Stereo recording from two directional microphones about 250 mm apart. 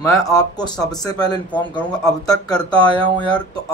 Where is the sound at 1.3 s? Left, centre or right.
Centre.